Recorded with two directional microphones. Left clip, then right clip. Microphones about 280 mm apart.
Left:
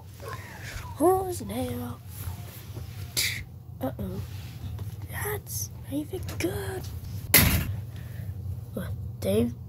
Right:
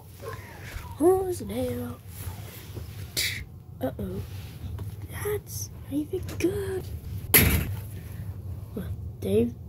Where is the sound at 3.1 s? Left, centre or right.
Centre.